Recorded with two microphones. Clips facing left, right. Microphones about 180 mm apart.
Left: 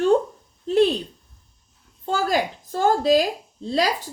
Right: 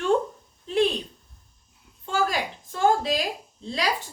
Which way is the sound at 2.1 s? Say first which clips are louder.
Left 4 dB; 40° left (ahead or behind).